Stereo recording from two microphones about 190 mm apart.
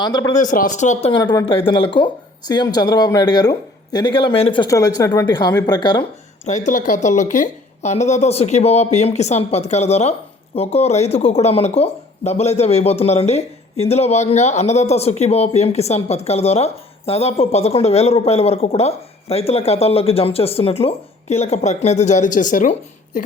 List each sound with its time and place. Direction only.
0.0 s speech: 20° left (ahead or behind)
0.3 s speech: 45° left (ahead or behind)
1.1 s speech: 20° left (ahead or behind)
6.4 s speech: 40° left (ahead or behind)